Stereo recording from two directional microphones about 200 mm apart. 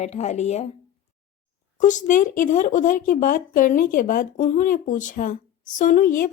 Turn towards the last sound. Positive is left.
turn(degrees=45)  # may be behind; listen again after turning